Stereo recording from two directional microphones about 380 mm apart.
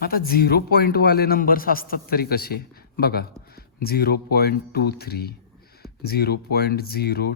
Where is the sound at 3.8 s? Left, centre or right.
Left.